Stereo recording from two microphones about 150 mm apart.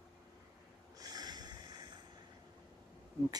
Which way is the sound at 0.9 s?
25° right (ahead or behind).